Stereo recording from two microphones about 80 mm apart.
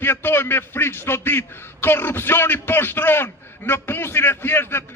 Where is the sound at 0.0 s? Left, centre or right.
Left.